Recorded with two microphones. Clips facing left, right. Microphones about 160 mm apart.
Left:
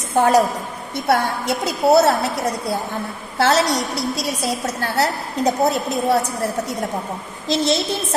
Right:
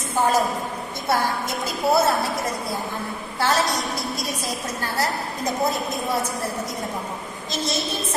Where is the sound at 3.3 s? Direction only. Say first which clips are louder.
Left 5 dB; 75° left (ahead or behind).